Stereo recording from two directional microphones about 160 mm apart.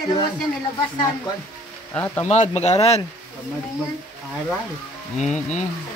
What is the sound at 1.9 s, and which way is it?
Speech, 10° left (ahead or behind).